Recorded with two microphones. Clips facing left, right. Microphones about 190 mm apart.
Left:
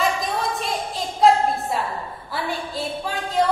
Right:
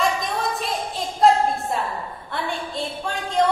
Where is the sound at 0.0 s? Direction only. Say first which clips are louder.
Even; centre (ahead or behind).